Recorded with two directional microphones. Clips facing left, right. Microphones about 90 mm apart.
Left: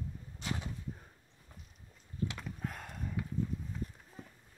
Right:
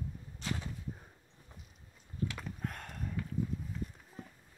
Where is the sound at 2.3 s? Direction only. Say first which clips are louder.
Even; centre (ahead or behind).